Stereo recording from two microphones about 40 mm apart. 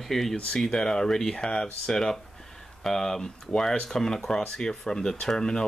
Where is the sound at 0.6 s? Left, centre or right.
Centre.